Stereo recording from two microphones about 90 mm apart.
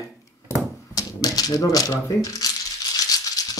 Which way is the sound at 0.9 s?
45° left (ahead or behind).